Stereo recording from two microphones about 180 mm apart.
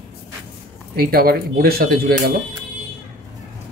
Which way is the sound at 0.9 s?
55° right (ahead or behind).